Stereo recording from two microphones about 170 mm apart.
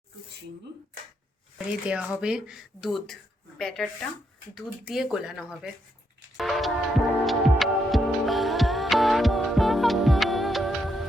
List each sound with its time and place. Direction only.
1.5 s speech: 5° right (ahead or behind)
7.3 s music: centre (ahead or behind)